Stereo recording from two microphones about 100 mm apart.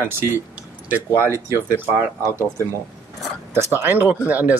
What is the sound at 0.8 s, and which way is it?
Speech, 15° right (ahead or behind).